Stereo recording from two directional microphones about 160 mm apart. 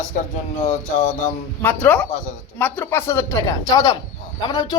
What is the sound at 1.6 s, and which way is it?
Speech, 10° left (ahead or behind).